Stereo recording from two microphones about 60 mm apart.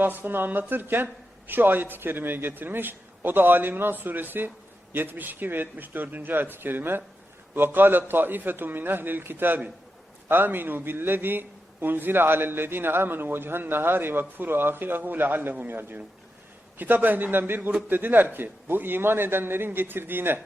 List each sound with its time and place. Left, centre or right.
0.0 s speech: right